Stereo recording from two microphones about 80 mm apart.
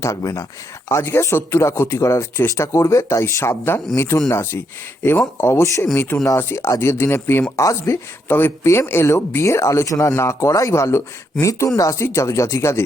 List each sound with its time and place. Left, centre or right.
0.0 s speech: left
8.3 s speech: left